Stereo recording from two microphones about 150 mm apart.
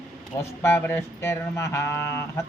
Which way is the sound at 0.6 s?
15° left (ahead or behind).